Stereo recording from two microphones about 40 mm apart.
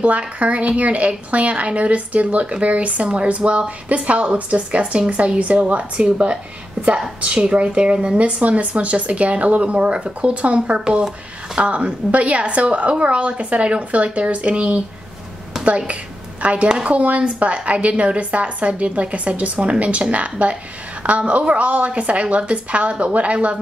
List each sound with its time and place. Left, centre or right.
0.0 s speech: right
15.5 s a sound: centre
16.6 s speech: right